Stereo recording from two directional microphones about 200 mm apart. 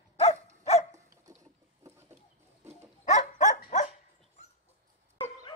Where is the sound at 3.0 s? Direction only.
35° left (ahead or behind).